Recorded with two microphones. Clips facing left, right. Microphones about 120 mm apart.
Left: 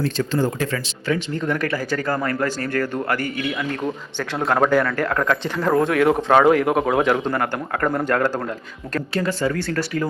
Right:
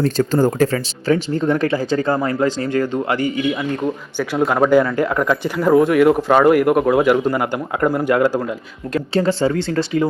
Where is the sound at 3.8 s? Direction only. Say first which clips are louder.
Right 4 dB; 5° right (ahead or behind).